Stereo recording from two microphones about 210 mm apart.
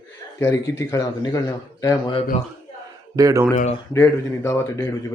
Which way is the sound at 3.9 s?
15° left (ahead or behind).